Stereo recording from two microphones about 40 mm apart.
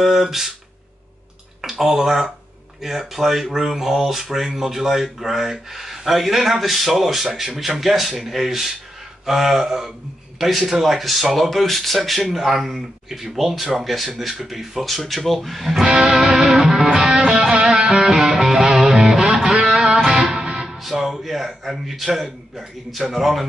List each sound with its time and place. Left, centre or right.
0.0 s speech: centre
1.6 s speech: centre
14.4 s music: centre
20.3 s music: right
20.6 s music: centre
23.1 s speech: centre